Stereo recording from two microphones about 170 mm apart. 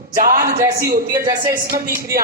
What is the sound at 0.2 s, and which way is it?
A woman's voice, 55° right (ahead or behind).